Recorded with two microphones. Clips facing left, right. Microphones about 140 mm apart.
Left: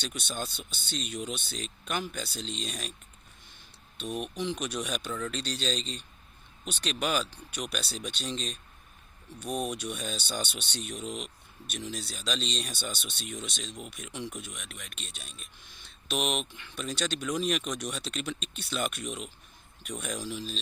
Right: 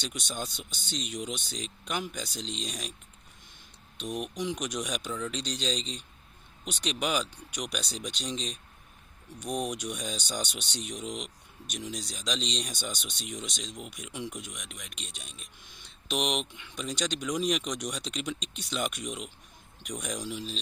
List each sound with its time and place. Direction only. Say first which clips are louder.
0.0 s speech: even; 15° right (ahead or behind)
3.9 s speech: even; 15° right (ahead or behind)